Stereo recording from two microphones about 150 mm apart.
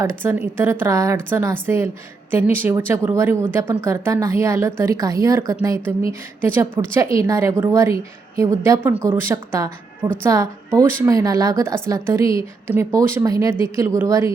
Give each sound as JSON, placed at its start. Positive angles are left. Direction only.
{"t": 0.0, "sound": "speech", "side_deg": -15}